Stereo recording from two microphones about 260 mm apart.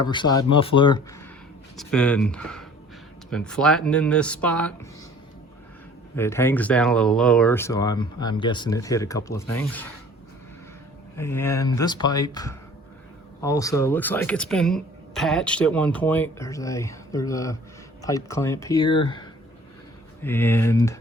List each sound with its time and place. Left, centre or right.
0.1 s speech: centre
1.7 s speech: centre
6.1 s speech: centre
11.2 s speech: centre